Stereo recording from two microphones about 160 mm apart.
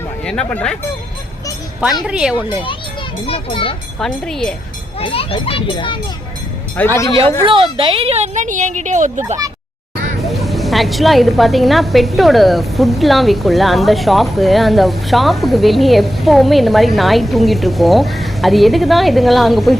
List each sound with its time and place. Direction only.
0.3 s a woman's voice: 5° left (ahead or behind)
2.0 s speech: 5° right (ahead or behind)
3.2 s a child's voice: 35° left (ahead or behind)
4.0 s a woman's voice: 5° left (ahead or behind)
4.9 s a child's voice: 35° left (ahead or behind)
6.8 s speech: 10° left (ahead or behind)
7.4 s speech: 35° right (ahead or behind); by 9.2 s 50° right (ahead or behind)
10.2 s a woman's voice: centre (ahead or behind)